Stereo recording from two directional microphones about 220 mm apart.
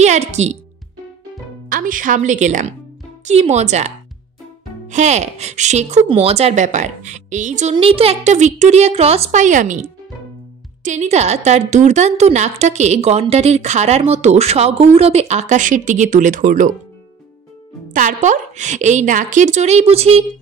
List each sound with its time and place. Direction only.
0.0 s speech: 30° right (ahead or behind)
1.7 s a woman's voice: 40° right (ahead or behind)
17.9 s a woman's voice: 35° right (ahead or behind)